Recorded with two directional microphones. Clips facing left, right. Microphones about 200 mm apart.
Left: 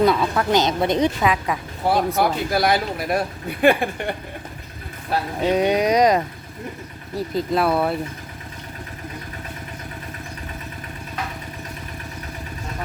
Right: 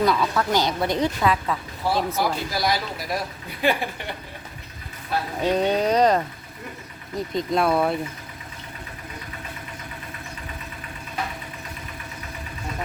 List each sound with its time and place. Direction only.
0.0 s a woman's voice: 25° left (ahead or behind)
2.1 s speech: 55° left (ahead or behind)
5.4 s speech: 10° left (ahead or behind)